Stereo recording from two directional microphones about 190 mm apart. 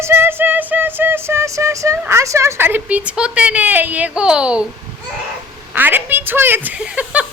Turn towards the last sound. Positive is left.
turn(degrees=-5)  # may be behind; listen again after turning